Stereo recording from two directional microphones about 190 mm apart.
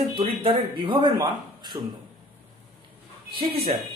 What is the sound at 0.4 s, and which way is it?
Speech, 25° right (ahead or behind).